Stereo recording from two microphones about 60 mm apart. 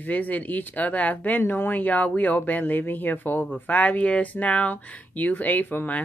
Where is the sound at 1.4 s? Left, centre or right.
Left.